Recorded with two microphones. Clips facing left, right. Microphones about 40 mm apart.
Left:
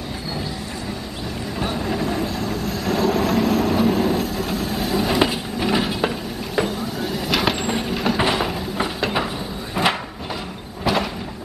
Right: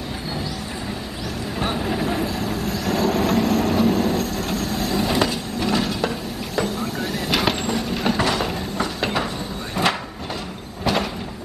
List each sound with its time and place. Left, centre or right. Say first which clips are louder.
1.8 s vehicle: left 1 dB; centre
5.2 s train: left 2 dB; centre
7.0 s vehicle: left 1 dB; centre
7.9 s train: even; centre
8.2 s a sound: left 1 dB; centre
10.8 s a sound: left 1 dB; centre